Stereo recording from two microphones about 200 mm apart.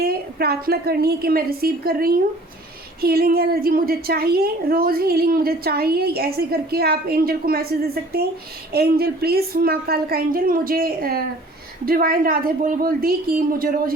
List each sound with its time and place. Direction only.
0.0 s a woman's voice: 50° right (ahead or behind)